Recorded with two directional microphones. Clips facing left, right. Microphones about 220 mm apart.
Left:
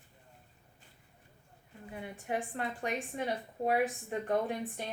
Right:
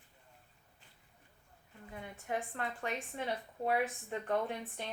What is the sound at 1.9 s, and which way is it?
A woman's voice, 15° left (ahead or behind).